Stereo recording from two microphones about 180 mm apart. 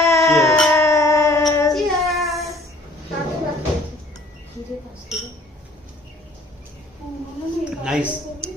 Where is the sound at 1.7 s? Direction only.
Centre (ahead or behind).